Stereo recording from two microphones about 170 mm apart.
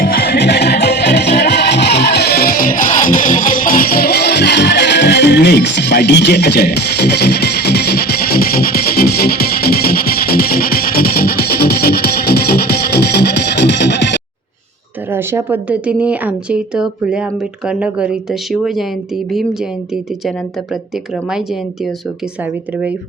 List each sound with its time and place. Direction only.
0.0 s music: 65° left (ahead or behind); by 14.2 s 90° left
15.1 s a woman's voice: 15° right (ahead or behind)